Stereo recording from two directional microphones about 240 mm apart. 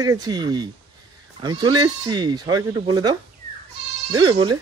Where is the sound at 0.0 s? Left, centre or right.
Centre.